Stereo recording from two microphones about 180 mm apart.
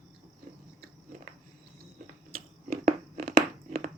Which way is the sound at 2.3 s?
55° right (ahead or behind).